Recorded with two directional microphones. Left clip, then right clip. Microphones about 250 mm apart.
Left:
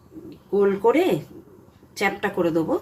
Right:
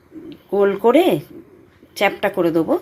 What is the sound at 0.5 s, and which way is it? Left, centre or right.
A woman's voice, right.